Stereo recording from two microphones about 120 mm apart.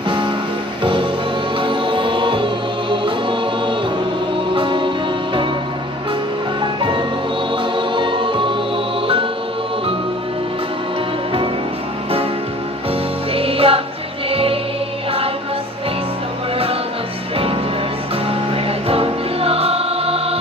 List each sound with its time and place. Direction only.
1.6 s music: 45° right (ahead or behind)
6.6 s music: 40° right (ahead or behind)
13.3 s music: 50° right (ahead or behind)
18.5 s music: 50° right (ahead or behind)